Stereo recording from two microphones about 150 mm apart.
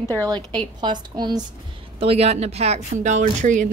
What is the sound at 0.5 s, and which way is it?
Speech, 30° right (ahead or behind).